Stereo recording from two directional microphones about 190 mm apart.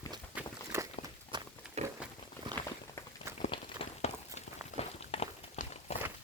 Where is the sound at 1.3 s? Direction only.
25° right (ahead or behind).